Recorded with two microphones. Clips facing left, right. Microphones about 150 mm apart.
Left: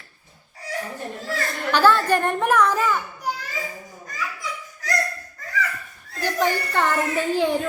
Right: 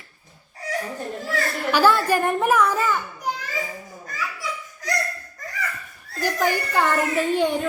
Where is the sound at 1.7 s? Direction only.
10° right (ahead or behind).